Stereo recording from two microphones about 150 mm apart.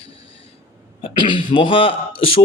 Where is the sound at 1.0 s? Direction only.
30° left (ahead or behind).